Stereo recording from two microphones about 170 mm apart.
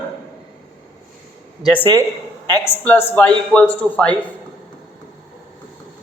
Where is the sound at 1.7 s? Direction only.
10° left (ahead or behind).